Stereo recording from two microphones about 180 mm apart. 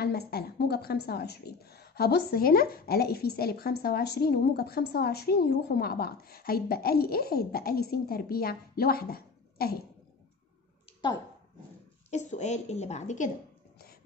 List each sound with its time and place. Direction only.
0.0 s a woman's voice: 60° left (ahead or behind)
12.1 s a woman's voice: 40° left (ahead or behind)